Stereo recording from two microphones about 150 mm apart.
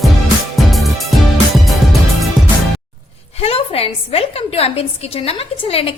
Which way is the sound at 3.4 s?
40° left (ahead or behind).